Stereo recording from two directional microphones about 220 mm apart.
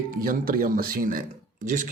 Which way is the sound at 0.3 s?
40° right (ahead or behind).